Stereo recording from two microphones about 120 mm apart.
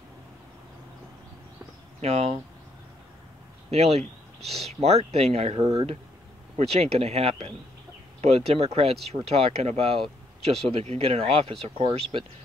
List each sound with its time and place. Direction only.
2.0 s speech: 60° right (ahead or behind)
3.7 s speech: 60° right (ahead or behind)